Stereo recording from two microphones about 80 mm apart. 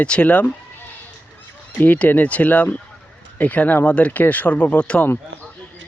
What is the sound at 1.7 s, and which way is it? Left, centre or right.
Speech, left.